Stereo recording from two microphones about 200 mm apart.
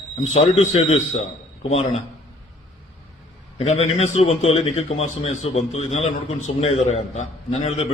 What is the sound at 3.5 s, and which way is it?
A man's voice, 30° left (ahead or behind).